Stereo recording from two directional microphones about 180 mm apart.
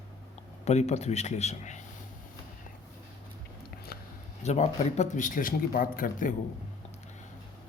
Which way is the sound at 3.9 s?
55° left (ahead or behind).